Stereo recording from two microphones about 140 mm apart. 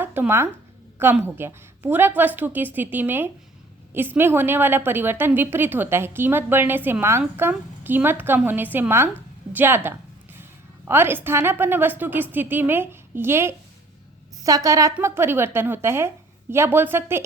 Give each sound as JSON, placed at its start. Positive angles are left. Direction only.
{"t": 0.0, "sound": "a woman's voice", "side_deg": -15}
{"t": 9.5, "sound": "a sound", "side_deg": -15}
{"t": 10.8, "sound": "a woman's voice", "side_deg": -15}